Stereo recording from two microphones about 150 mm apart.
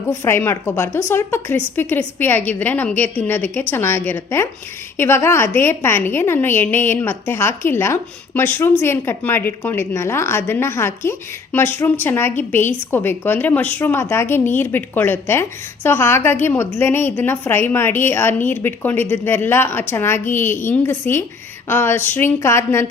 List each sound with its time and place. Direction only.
0.1 s a woman's voice: 15° left (ahead or behind)